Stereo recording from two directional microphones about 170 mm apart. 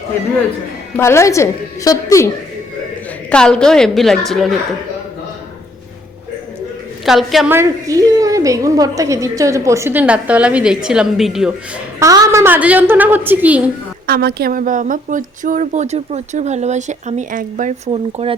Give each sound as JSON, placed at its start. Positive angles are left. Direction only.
{"t": 0.9, "sound": "a woman's voice", "side_deg": 15}
{"t": 3.2, "sound": "a woman's voice", "side_deg": 5}
{"t": 7.0, "sound": "a woman's voice", "side_deg": 0}
{"t": 7.5, "sound": "a woman's voice", "side_deg": -15}
{"t": 11.9, "sound": "a woman's voice", "side_deg": -20}
{"t": 14.1, "sound": "speech", "side_deg": -70}
{"t": 17.9, "sound": "speech", "side_deg": -35}